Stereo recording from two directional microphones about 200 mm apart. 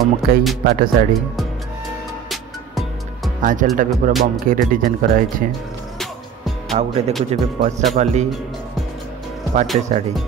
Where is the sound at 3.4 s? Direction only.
40° right (ahead or behind).